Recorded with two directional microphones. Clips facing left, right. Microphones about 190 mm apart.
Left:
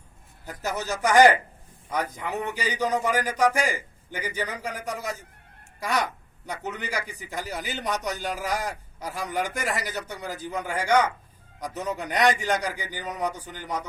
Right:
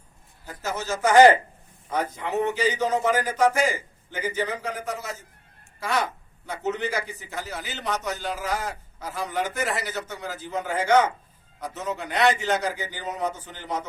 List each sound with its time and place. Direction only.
0.4 s speech: 15° left (ahead or behind)